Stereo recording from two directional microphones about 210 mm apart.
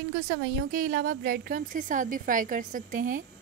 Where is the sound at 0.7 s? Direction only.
40° right (ahead or behind).